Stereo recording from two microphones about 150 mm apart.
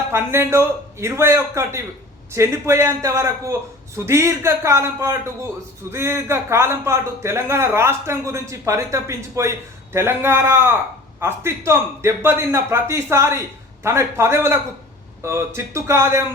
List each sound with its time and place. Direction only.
0.1 s a man's voice: 15° right (ahead or behind)